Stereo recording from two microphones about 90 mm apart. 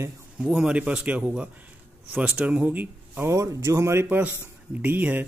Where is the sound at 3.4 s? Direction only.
35° right (ahead or behind).